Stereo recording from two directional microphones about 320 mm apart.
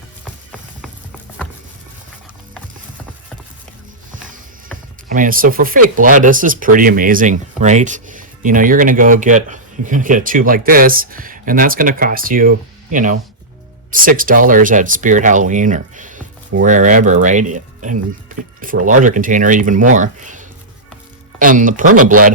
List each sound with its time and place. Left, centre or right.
5.0 s speech: right